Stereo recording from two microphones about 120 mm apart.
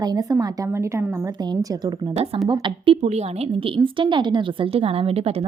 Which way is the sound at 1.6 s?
35° right (ahead or behind).